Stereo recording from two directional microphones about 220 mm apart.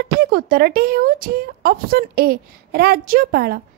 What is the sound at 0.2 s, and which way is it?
Speech, 45° right (ahead or behind).